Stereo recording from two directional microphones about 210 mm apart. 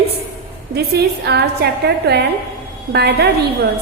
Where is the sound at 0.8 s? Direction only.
50° right (ahead or behind).